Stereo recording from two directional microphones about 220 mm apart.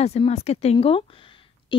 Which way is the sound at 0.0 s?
30° left (ahead or behind).